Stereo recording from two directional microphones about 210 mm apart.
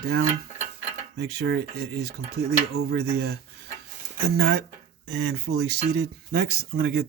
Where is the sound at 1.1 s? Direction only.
50° right (ahead or behind).